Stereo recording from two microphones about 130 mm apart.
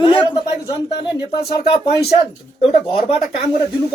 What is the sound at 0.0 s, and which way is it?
Speech, 40° left (ahead or behind).